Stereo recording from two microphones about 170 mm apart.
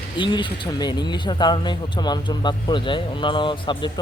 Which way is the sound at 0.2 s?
25° left (ahead or behind).